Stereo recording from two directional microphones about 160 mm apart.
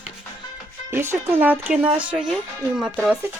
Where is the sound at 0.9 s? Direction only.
15° right (ahead or behind).